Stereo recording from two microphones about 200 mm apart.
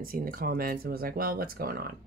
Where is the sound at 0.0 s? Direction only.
45° right (ahead or behind).